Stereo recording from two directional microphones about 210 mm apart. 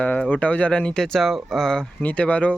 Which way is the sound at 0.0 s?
5° left (ahead or behind).